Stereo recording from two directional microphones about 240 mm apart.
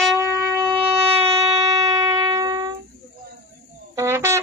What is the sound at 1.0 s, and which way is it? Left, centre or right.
Shofar, right.